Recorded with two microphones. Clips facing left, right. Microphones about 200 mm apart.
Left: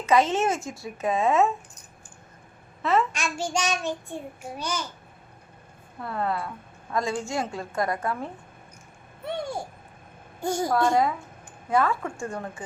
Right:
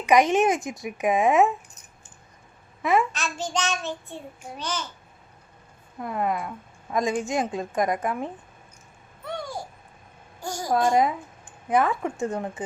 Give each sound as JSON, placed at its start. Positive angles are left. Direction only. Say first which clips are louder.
{"t": 0.0, "sound": "speech", "louder": "right 3 dB", "side_deg": -15}
{"t": 2.8, "sound": "a child's voice", "louder": "right 1 dB", "side_deg": -15}
{"t": 3.1, "sound": "child singing", "louder": "left 1 dB", "side_deg": 10}
{"t": 6.0, "sound": "speech", "louder": "right 2 dB", "side_deg": -15}
{"t": 9.2, "sound": "a sound", "louder": "left 3 dB", "side_deg": 25}
{"t": 10.4, "sound": "a woman's voice", "louder": "left 6 dB", "side_deg": 25}
{"t": 10.7, "sound": "a woman's voice", "louder": "right 3 dB", "side_deg": -20}